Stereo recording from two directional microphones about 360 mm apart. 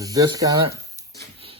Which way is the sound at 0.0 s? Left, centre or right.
Centre.